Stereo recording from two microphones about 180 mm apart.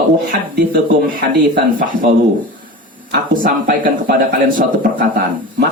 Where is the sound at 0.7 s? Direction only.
55° right (ahead or behind).